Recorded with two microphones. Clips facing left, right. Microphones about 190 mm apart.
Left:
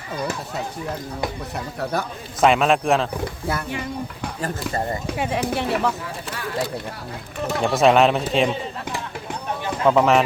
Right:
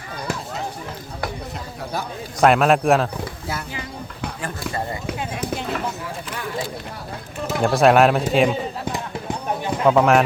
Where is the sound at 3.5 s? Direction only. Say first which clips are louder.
Left 5 dB; 60° left (ahead or behind).